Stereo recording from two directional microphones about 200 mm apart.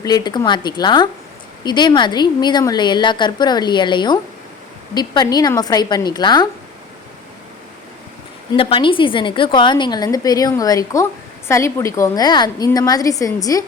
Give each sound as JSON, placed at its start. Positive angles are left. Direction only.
{"t": 0.0, "sound": "a woman's voice", "side_deg": 20}
{"t": 8.5, "sound": "a woman's voice", "side_deg": 25}